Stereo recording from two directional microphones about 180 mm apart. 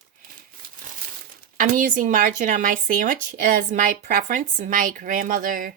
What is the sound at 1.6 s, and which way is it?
Speech, 45° right (ahead or behind).